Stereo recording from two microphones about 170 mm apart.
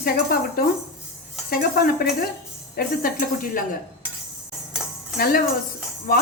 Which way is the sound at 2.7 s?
55° left (ahead or behind).